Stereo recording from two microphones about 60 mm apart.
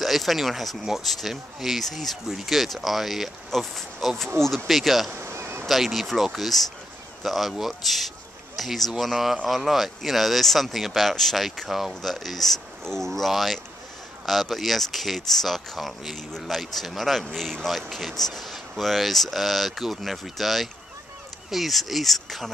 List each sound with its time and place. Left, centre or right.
0.0 s speech: centre
5.1 s a sound: right
5.7 s speech: centre